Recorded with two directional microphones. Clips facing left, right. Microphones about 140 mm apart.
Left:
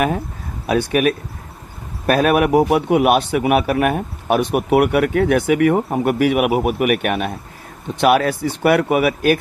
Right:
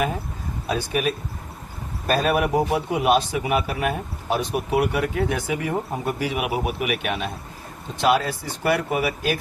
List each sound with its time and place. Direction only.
0.7 s a man's voice: 65° left (ahead or behind)